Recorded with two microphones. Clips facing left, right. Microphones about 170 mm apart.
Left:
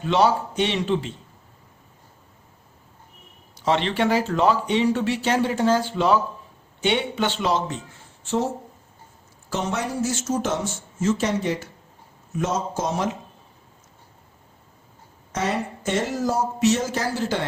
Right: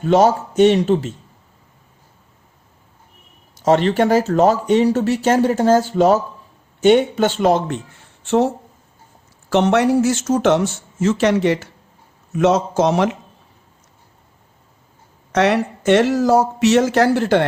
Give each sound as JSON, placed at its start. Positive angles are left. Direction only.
{"t": 0.0, "sound": "speech", "side_deg": -45}
{"t": 3.6, "sound": "speech", "side_deg": -45}
{"t": 8.2, "sound": "speech", "side_deg": -70}
{"t": 9.5, "sound": "a man's voice", "side_deg": -70}
{"t": 15.3, "sound": "speech", "side_deg": -75}